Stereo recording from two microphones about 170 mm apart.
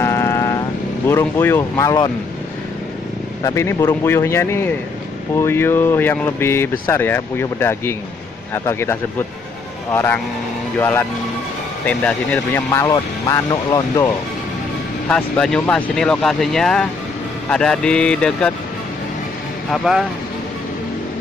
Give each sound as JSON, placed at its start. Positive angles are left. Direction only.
{"t": 0.0, "sound": "vehicle", "side_deg": 15}
{"t": 1.0, "sound": "speech", "side_deg": 15}
{"t": 3.4, "sound": "speech", "side_deg": 15}
{"t": 15.0, "sound": "speech", "side_deg": 5}
{"t": 19.7, "sound": "speech", "side_deg": 0}